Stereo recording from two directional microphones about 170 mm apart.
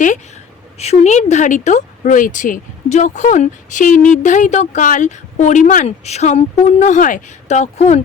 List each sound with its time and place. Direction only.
0.8 s speech: 40° left (ahead or behind)